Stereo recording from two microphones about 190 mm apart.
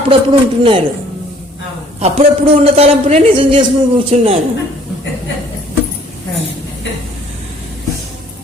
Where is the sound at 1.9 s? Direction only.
35° right (ahead or behind).